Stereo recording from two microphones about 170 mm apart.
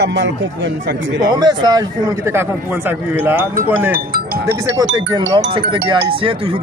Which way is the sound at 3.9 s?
60° right (ahead or behind).